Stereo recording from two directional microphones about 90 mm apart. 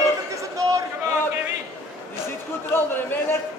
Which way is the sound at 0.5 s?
40° right (ahead or behind).